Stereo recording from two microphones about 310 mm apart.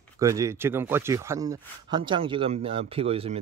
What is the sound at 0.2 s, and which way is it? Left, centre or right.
A man's voice, centre.